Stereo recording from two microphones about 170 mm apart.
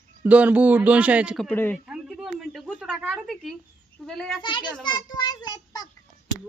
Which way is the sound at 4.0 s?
Centre (ahead or behind).